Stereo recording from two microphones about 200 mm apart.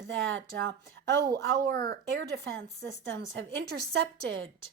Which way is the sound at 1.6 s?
45° right (ahead or behind).